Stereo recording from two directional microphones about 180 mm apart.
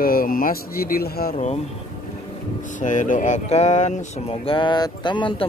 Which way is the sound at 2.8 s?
45° left (ahead or behind).